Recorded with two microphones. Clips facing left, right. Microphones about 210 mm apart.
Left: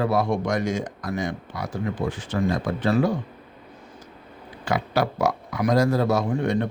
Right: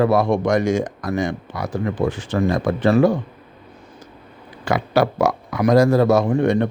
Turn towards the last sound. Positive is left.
turn(degrees=-75)  # may be behind; listen again after turning